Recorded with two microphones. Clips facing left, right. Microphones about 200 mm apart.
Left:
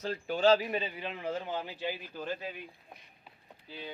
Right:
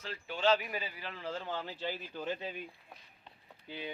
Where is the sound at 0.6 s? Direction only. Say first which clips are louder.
Left 6 dB; 25° left (ahead or behind).